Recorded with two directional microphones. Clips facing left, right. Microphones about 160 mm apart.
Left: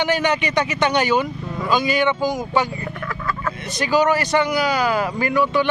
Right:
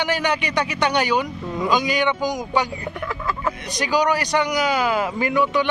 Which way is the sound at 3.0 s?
15° right (ahead or behind).